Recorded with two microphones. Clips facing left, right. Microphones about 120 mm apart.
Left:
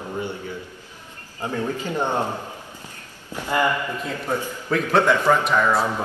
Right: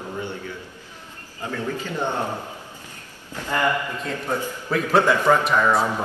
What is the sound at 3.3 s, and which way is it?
Speech, 15° left (ahead or behind).